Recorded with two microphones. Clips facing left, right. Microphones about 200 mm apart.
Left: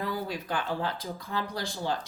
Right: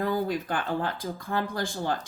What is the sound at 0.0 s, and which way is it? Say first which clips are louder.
Speech: right 6 dB; 50° right (ahead or behind).